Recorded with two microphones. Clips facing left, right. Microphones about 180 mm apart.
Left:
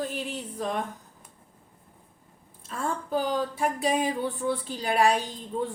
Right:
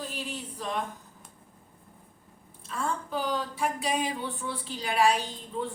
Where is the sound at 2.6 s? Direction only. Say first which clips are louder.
Left 1 dB; 45° left (ahead or behind).